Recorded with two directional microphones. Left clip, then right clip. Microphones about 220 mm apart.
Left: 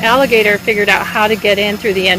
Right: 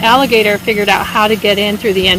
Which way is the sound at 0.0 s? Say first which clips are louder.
Right 1 dB; 50° right (ahead or behind).